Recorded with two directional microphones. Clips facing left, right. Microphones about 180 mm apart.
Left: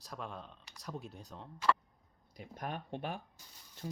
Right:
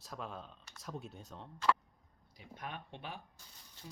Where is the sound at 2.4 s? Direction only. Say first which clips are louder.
Left 5 dB; 45° left (ahead or behind).